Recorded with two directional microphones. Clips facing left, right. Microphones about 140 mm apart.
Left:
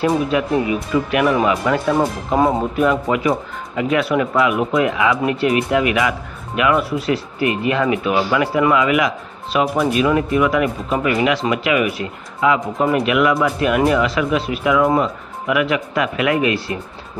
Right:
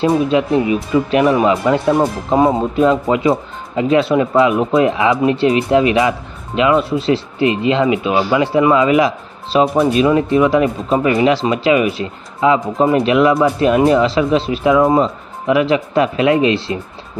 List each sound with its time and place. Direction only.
0.3 s speech: 25° right (ahead or behind)